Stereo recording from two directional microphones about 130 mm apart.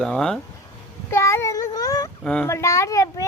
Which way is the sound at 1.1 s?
20° left (ahead or behind).